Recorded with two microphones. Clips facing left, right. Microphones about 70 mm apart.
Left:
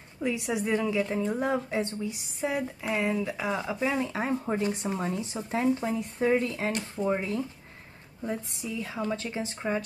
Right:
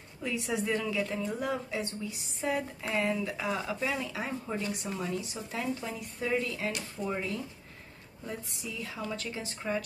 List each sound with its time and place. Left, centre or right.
0.2 s a woman's voice: centre
2.4 s a woman's voice: centre
4.1 s a woman's voice: left